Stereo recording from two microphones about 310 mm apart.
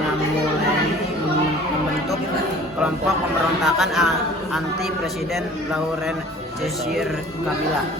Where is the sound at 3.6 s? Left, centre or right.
Centre.